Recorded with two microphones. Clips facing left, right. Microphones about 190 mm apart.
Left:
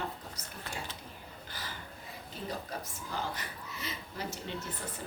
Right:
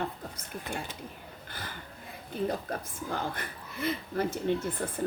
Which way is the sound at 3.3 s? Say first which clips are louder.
Right 4 dB; 55° right (ahead or behind).